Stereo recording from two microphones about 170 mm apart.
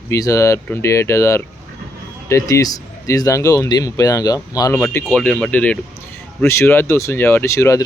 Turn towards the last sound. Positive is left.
turn(degrees=15)  # may be behind; listen again after turning